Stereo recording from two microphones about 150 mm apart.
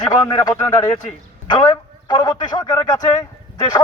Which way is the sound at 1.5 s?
25° left (ahead or behind).